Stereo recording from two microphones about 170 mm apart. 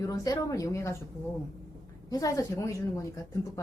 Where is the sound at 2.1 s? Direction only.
20° left (ahead or behind).